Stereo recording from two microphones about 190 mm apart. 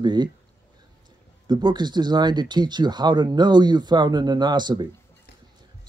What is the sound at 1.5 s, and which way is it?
Speech, 25° right (ahead or behind).